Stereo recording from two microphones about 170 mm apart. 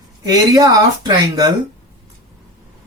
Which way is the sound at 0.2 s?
20° right (ahead or behind).